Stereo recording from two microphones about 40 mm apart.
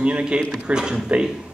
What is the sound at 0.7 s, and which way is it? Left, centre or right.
Speech, centre.